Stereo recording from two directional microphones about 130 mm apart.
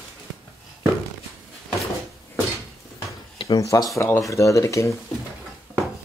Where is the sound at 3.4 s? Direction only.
25° left (ahead or behind).